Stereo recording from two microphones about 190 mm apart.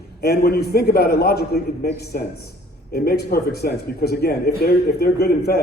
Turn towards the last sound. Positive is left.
turn(degrees=55)  # may be behind; listen again after turning